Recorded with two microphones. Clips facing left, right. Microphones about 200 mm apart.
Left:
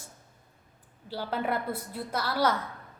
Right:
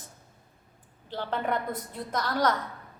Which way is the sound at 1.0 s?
10° left (ahead or behind).